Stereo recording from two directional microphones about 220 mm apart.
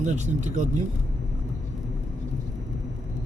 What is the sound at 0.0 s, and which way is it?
Speech, 30° right (ahead or behind).